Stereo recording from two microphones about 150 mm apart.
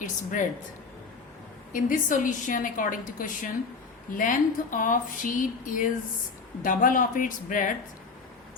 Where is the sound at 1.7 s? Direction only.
60° left (ahead or behind).